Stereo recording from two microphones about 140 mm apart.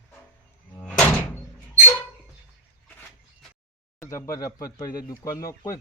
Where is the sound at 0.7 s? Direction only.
10° left (ahead or behind).